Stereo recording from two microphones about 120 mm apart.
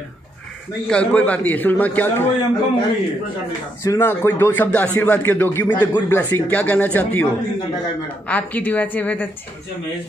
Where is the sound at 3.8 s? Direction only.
20° left (ahead or behind).